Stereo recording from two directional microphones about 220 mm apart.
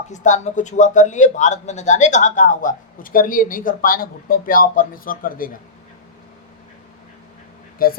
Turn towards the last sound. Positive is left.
turn(degrees=40)  # may be behind; listen again after turning